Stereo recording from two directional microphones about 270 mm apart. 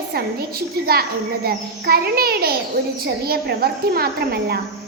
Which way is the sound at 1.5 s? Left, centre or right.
Right.